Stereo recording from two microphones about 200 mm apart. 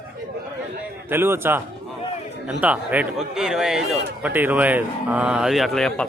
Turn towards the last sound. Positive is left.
turn(degrees=5)  # may be behind; listen again after turning